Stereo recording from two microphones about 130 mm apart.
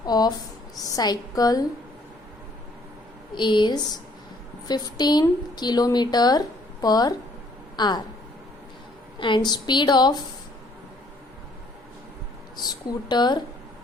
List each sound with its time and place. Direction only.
0.0 s a woman's voice: 30° left (ahead or behind)
3.3 s a woman's voice: 35° left (ahead or behind)
9.1 s a woman's voice: 40° left (ahead or behind)
12.5 s a woman's voice: 35° left (ahead or behind)